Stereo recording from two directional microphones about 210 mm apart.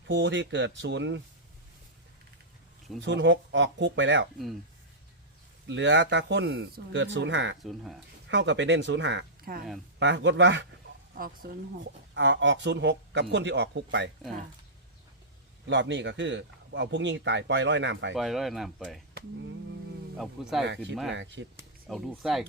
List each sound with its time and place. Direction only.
0.1 s speech: 60° right (ahead or behind)
3.0 s speech: 60° right (ahead or behind)
5.6 s speech: 60° right (ahead or behind)
7.6 s speech: centre (ahead or behind)
8.3 s speech: 60° right (ahead or behind)
10.0 s speech: 60° right (ahead or behind)
11.4 s speech: 45° right (ahead or behind)
11.8 s speech: 60° right (ahead or behind)
15.6 s speech: 60° right (ahead or behind)
18.1 s speech: centre (ahead or behind)
20.1 s speech: centre (ahead or behind)
21.1 s speech: 60° right (ahead or behind)
21.8 s speech: centre (ahead or behind)